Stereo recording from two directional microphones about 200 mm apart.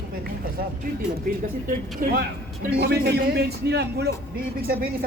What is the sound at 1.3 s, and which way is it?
Speech, 45° right (ahead or behind).